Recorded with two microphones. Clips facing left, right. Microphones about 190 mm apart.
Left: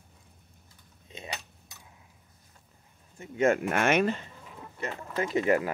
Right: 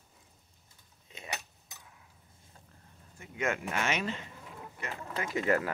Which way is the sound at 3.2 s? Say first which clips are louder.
Left 9 dB; 30° left (ahead or behind).